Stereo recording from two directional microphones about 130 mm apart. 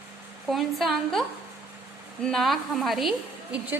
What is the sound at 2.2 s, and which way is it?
Speech, centre (ahead or behind).